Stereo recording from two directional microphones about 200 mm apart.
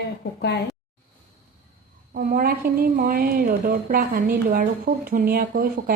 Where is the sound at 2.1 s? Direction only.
50° right (ahead or behind).